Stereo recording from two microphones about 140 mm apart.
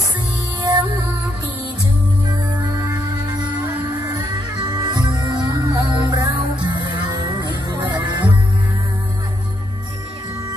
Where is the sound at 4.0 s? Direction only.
30° right (ahead or behind).